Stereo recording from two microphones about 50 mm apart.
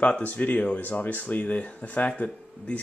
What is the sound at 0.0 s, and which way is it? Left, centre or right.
Speech, left.